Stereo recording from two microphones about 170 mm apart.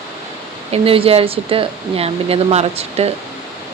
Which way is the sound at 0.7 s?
35° right (ahead or behind).